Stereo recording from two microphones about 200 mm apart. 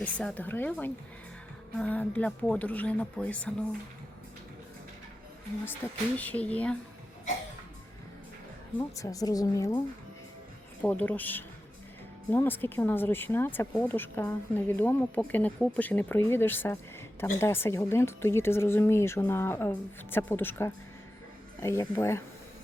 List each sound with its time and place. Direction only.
0.0 s speech: 5° left (ahead or behind)
5.8 s speech: 10° left (ahead or behind)
9.0 s speech: 15° left (ahead or behind)
10.8 s speech: 5° left (ahead or behind)